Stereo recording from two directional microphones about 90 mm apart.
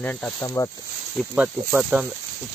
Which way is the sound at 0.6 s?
40° left (ahead or behind).